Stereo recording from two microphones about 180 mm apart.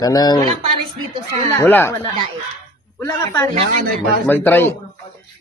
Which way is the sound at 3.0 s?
15° left (ahead or behind).